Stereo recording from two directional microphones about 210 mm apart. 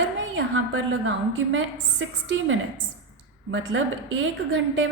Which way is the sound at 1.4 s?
60° right (ahead or behind).